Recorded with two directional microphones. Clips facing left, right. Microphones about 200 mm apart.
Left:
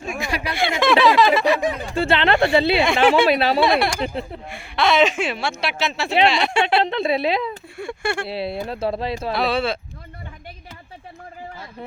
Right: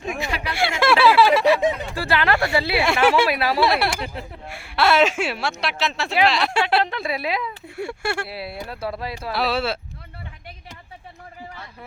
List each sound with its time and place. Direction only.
0.2 s a sound: 15° left (ahead or behind)
0.5 s a sound: 10° right (ahead or behind)
2.0 s speech: 25° left (ahead or behind)
2.8 s speech: 5° right (ahead or behind)
3.2 s speech: 25° left (ahead or behind)
3.6 s speech: 5° right (ahead or behind)
4.0 s speech: 25° left (ahead or behind)
4.4 s speech: 5° right (ahead or behind)
6.8 s speech: 25° left (ahead or behind)
7.8 s a sound: 5° right (ahead or behind)
8.3 s speech: 25° left (ahead or behind)
9.3 s speech: 5° right (ahead or behind)